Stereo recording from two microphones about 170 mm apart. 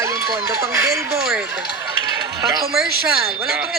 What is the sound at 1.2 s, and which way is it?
Speech, 5° right (ahead or behind).